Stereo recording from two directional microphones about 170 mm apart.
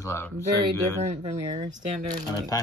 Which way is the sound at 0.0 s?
15° left (ahead or behind).